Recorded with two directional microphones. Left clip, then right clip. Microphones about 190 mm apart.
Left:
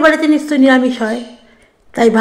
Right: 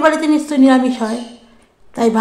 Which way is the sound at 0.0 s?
10° left (ahead or behind).